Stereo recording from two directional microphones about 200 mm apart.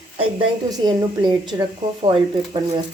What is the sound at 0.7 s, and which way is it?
Speech, 20° right (ahead or behind).